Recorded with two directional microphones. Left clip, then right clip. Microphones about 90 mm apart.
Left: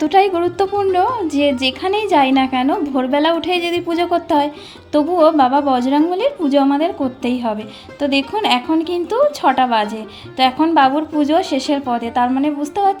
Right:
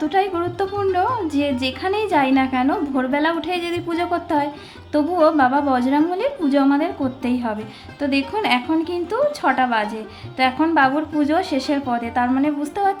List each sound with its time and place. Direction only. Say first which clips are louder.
0.0 s speech: left 6 dB; 65° left (ahead or behind)
0.8 s a woman's voice: left 2 dB; 40° left (ahead or behind)
12.3 s music: left 2 dB; 25° left (ahead or behind)